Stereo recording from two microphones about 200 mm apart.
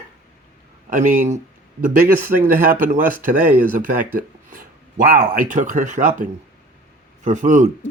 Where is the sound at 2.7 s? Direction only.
40° right (ahead or behind).